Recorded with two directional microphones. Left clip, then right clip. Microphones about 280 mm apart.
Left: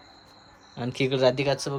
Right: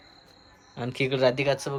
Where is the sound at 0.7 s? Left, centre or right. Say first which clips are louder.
Left 1 dB; centre.